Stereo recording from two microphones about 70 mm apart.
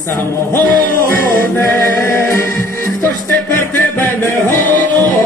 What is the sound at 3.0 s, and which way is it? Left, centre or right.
Music, left.